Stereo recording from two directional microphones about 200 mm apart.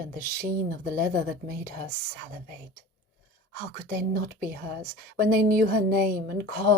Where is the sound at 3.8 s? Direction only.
45° right (ahead or behind).